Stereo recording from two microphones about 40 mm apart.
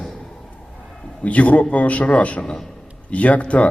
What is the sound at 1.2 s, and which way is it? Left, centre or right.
A man's voice, left.